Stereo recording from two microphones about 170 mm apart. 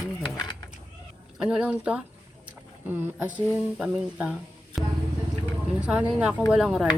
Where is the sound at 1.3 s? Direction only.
5° right (ahead or behind).